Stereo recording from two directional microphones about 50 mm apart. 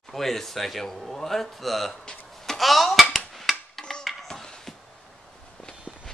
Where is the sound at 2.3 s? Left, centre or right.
Centre.